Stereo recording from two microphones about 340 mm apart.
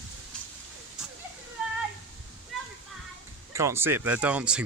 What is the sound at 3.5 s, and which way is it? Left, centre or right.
Speech, centre.